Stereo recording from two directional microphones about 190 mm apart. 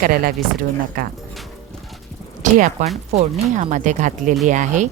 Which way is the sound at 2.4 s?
45° right (ahead or behind).